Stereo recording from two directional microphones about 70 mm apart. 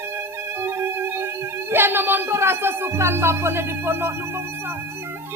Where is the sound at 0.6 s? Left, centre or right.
Right.